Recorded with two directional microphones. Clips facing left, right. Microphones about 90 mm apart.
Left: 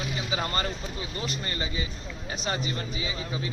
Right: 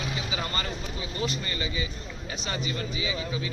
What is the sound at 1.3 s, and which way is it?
Speech, 35° left (ahead or behind).